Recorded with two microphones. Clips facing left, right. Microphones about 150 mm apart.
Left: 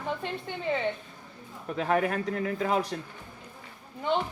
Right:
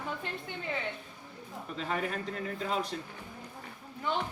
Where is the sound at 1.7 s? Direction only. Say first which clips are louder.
Left 8 dB; 60° left (ahead or behind).